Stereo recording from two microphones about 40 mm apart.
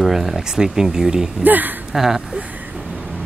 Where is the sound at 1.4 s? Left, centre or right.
Right.